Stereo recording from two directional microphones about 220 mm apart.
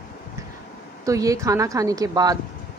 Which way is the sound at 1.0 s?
15° right (ahead or behind).